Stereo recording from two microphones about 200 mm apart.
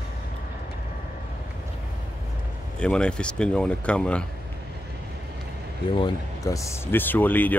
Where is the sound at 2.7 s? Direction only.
5° left (ahead or behind).